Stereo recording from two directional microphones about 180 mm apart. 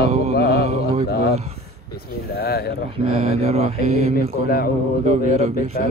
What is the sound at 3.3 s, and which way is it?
Mantra, 35° right (ahead or behind).